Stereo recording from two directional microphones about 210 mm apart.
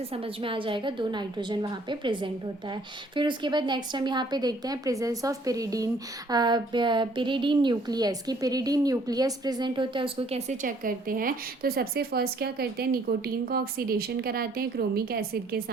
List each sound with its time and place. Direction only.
0.1 s a woman's voice: 25° right (ahead or behind); by 15.6 s 45° right (ahead or behind)